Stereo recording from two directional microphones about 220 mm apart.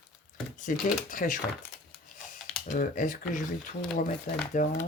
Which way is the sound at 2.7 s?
35° left (ahead or behind).